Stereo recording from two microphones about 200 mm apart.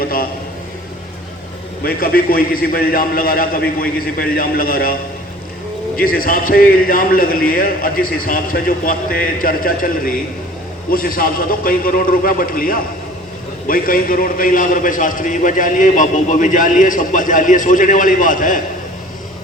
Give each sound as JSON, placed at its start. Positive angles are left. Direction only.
{"t": 0.0, "sound": "a sound", "side_deg": 45}
{"t": 1.8, "sound": "a man's voice", "side_deg": 45}
{"t": 6.1, "sound": "a man's voice", "side_deg": 45}